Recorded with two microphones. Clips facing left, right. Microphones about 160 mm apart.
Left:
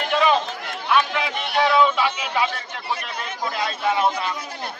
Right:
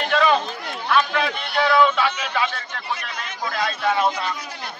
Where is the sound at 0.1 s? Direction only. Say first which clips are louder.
Even; 15° left (ahead or behind).